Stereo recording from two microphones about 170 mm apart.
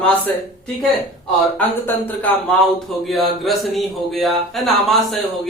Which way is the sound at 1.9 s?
10° left (ahead or behind).